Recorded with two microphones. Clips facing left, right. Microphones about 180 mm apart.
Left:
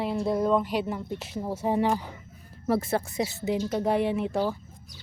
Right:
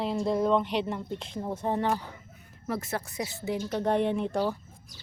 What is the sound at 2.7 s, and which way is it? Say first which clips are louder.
Speech: left 7 dB; 30° left (ahead or behind).